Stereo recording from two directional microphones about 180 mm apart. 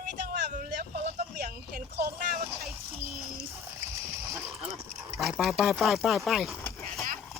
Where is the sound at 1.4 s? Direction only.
55° right (ahead or behind).